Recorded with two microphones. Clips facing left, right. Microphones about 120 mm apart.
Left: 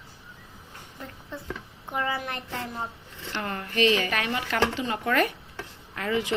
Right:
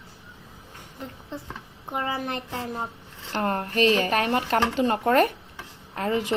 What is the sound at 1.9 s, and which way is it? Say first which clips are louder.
Speech: right 1 dB; 30° right (ahead or behind).